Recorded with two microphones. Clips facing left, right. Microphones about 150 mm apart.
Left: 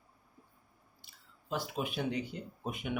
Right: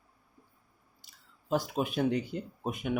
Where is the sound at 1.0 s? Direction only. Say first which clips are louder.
Right 2 dB; 40° right (ahead or behind).